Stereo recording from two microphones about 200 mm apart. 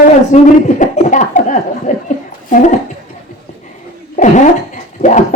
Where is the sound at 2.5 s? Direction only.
40° left (ahead or behind).